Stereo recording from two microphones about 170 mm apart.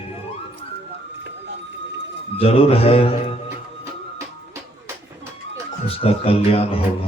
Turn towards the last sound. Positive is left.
turn(degrees=35)  # may be behind; listen again after turning